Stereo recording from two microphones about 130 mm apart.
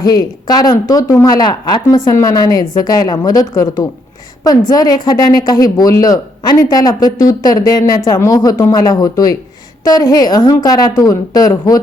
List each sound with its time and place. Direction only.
0.0 s a woman's voice: 30° left (ahead or behind)